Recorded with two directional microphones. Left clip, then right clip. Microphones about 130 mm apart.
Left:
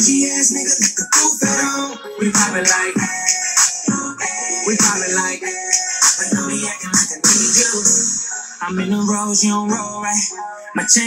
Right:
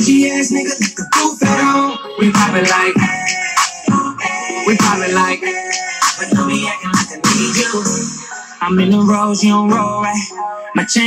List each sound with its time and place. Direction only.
0.0 s music: 25° right (ahead or behind)